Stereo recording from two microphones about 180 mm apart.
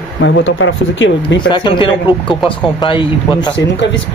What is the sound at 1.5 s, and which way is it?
Speech, 25° left (ahead or behind).